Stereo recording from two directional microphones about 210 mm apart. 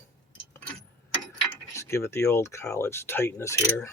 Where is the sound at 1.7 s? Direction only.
15° left (ahead or behind).